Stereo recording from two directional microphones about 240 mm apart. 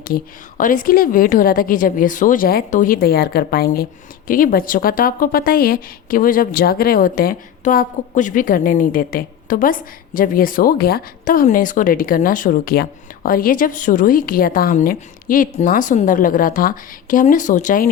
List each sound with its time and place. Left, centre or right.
0.0 s a woman's voice: left